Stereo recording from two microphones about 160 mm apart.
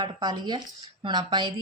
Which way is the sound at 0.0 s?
25° right (ahead or behind).